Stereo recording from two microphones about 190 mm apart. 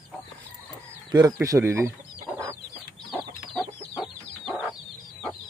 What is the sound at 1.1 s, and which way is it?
Speech, 20° right (ahead or behind).